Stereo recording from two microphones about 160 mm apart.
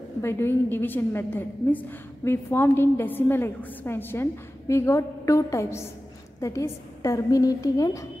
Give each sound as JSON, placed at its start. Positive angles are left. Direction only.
{"t": 0.2, "sound": "a woman's voice", "side_deg": 15}